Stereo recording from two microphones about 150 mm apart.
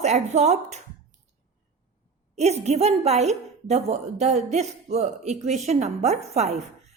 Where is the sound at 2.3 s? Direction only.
45° right (ahead or behind).